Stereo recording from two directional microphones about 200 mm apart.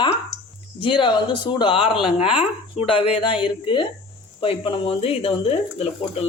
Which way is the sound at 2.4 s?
30° left (ahead or behind).